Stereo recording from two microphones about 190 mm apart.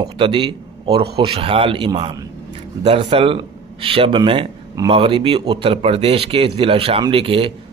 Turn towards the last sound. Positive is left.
turn(degrees=-30)  # may be behind; listen again after turning